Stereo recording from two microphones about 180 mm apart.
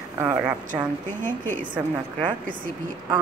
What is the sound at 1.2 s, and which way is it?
Speech, 10° left (ahead or behind).